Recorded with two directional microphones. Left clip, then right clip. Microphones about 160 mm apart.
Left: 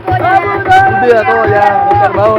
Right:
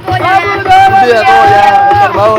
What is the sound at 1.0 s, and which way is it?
Speech, 5° right (ahead or behind).